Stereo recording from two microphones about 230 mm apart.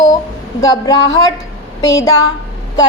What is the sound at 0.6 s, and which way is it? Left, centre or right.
A woman's voice, centre.